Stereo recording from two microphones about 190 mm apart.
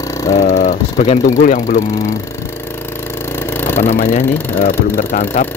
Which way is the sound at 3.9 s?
45° left (ahead or behind).